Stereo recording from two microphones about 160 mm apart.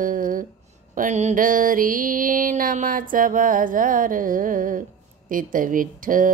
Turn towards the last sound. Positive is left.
turn(degrees=-60)  # may be behind; listen again after turning